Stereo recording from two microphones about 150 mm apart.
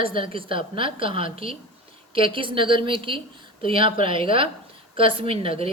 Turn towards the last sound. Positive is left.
turn(degrees=-40)  # may be behind; listen again after turning